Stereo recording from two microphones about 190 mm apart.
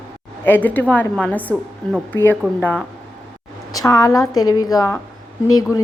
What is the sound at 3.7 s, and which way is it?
A woman's voice, 20° left (ahead or behind).